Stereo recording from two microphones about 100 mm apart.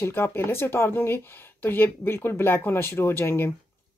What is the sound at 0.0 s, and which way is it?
Speech, 25° left (ahead or behind).